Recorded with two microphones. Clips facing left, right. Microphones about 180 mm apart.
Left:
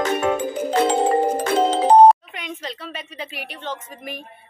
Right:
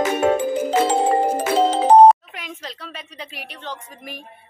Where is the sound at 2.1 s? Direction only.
Centre (ahead or behind).